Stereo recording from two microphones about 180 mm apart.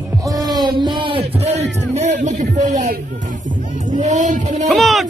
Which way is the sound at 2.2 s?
40° right (ahead or behind).